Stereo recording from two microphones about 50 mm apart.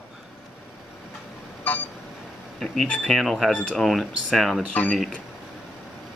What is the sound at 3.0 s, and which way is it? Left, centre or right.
Speech, centre.